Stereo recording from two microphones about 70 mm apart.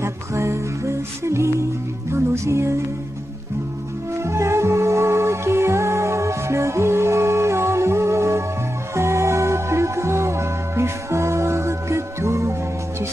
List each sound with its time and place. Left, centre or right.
0.0 s music: right
4.2 s music: right